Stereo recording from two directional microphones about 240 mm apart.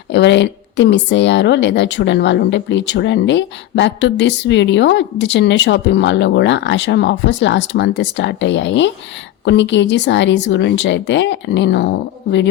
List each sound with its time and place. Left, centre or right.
0.1 s speech: left